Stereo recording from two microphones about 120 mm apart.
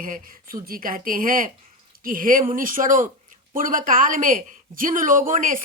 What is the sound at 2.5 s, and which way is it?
A woman's voice, 90° right.